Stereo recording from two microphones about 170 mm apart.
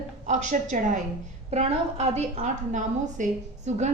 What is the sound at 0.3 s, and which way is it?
A woman's voice, 45° right (ahead or behind).